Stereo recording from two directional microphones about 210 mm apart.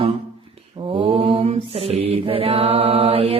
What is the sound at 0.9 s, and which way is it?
Mantra, 25° right (ahead or behind).